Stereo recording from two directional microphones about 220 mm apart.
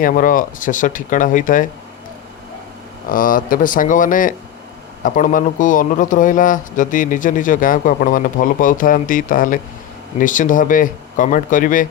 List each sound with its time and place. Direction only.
0.0 s speech: 40° left (ahead or behind)
3.1 s speech: 40° left (ahead or behind)